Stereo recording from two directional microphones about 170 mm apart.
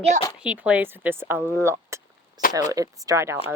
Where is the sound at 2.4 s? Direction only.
20° right (ahead or behind).